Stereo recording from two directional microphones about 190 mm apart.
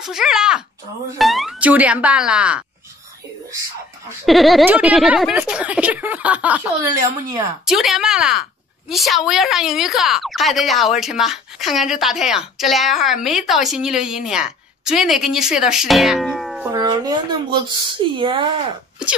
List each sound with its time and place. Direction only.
0.0 s a woman's voice: 5° right (ahead or behind)
4.3 s a woman's voice: centre (ahead or behind)
7.6 s a woman's voice: centre (ahead or behind)
16.7 s speech: 20° right (ahead or behind)